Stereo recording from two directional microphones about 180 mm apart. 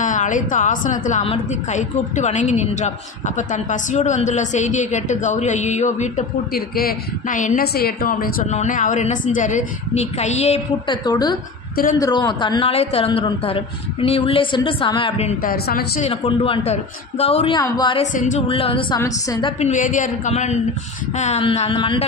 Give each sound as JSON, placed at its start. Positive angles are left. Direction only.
{"t": 0.0, "sound": "a woman's voice", "side_deg": 45}
{"t": 8.5, "sound": "a woman's voice", "side_deg": 40}
{"t": 11.1, "sound": "a woman's voice", "side_deg": 20}
{"t": 11.7, "sound": "a woman's voice", "side_deg": 50}
{"t": 12.0, "sound": "a woman's voice", "side_deg": 25}
{"t": 15.4, "sound": "a woman's voice", "side_deg": 55}
{"t": 16.0, "sound": "a woman's voice", "side_deg": 30}
{"t": 18.1, "sound": "a woman's voice", "side_deg": 45}
{"t": 18.5, "sound": "a woman's voice", "side_deg": 30}
{"t": 18.9, "sound": "a woman's voice", "side_deg": 20}
{"t": 19.6, "sound": "a woman's voice", "side_deg": 45}